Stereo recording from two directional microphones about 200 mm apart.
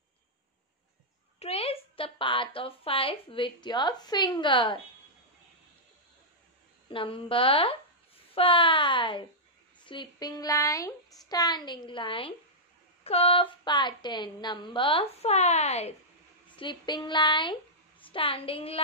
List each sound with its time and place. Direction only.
1.4 s a woman's voice: 30° left (ahead or behind)
6.9 s a woman's voice: 25° left (ahead or behind)
16.5 s a woman's voice: 25° left (ahead or behind)